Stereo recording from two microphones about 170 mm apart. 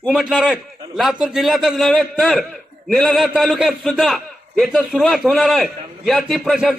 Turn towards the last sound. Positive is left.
turn(degrees=0)  # may be behind; listen again after turning